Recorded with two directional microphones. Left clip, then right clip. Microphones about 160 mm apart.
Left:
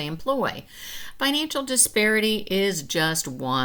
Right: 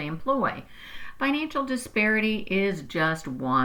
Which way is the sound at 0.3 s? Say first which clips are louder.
Even; 25° left (ahead or behind).